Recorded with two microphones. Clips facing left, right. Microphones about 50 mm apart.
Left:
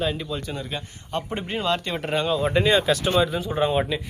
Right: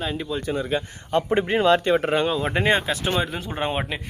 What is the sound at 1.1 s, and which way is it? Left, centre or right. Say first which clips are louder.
Speech: right 8 dB; right.